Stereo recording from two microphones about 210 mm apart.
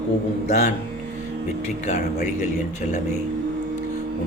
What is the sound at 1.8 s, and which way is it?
Speech, 35° left (ahead or behind).